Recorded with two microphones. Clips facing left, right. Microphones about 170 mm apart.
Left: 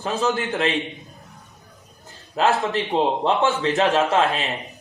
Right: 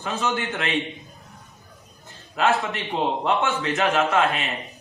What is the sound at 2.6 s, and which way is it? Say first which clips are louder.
A man's voice: left 5 dB; 35° left (ahead or behind).